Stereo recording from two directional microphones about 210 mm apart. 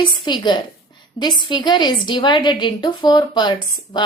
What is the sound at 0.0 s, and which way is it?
A woman's voice, 20° left (ahead or behind).